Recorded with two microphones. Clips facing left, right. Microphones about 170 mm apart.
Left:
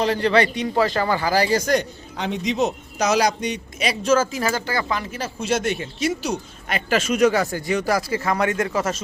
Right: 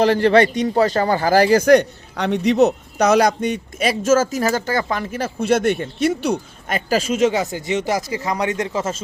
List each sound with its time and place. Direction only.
0.0 s a man's voice: 50° right (ahead or behind); by 9.0 s 20° right (ahead or behind)